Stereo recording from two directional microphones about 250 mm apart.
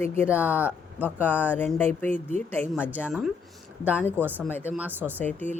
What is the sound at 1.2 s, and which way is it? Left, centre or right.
Speech, centre.